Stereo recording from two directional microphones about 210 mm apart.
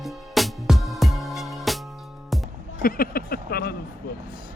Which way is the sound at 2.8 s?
45° left (ahead or behind).